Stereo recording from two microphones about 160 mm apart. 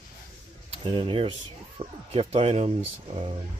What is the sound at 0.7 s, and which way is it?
Speech, 35° right (ahead or behind).